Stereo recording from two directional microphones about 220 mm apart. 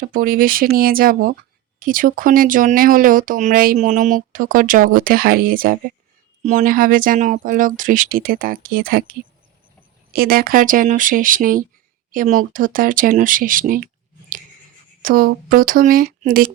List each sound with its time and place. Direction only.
0.0 s speech: 40° right (ahead or behind)